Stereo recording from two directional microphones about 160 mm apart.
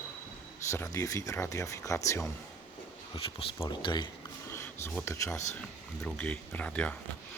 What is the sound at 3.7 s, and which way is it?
Speech, 30° left (ahead or behind).